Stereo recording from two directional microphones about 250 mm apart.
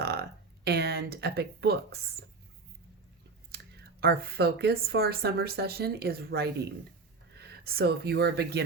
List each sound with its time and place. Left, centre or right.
0.0 s speech: right
3.5 s speech: right